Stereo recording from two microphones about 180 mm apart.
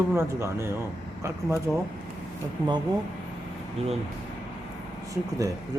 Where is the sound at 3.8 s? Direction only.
35° right (ahead or behind).